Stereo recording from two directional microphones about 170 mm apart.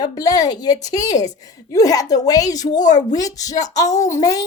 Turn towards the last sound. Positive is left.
turn(degrees=20)  # may be behind; listen again after turning